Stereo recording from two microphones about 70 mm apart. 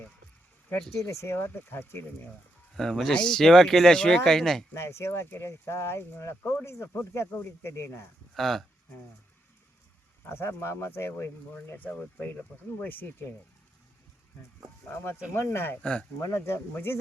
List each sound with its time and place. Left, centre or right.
1.0 s speech: left
2.7 s speech: centre
4.7 s speech: left
8.4 s speech: centre
10.2 s speech: left
11.5 s speech: left
14.8 s speech: left
15.8 s speech: centre
16.2 s speech: left
16.7 s speech: left